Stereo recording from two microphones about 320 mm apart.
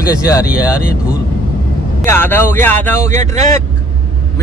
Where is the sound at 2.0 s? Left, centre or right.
Centre.